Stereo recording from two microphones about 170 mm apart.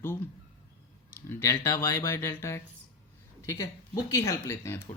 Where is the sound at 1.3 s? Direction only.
15° left (ahead or behind).